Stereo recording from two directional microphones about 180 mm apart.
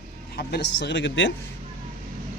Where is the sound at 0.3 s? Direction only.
70° left (ahead or behind); by 1.3 s 90° left.